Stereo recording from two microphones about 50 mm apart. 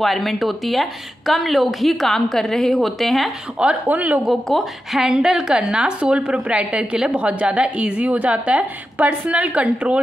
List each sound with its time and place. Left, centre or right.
0.0 s a woman's voice: centre
3.8 s speech: right
4.2 s a woman's voice: centre; by 9.9 s right